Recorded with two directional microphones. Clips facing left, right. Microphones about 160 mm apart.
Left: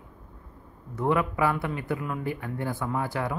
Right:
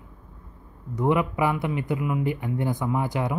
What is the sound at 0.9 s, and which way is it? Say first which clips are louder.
Speech: right 2 dB; 15° right (ahead or behind).